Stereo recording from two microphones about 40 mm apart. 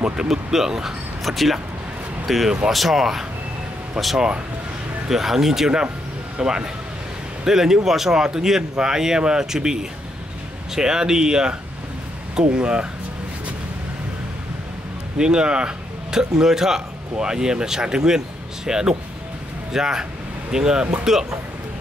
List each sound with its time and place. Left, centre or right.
0.0 s speech: centre
1.2 s speech: centre
6.4 s speech: right
12.5 s speech: right
15.1 s speech: centre